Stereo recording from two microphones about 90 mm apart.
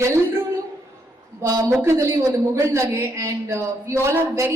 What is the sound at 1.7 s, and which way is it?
A man's voice, 30° right (ahead or behind).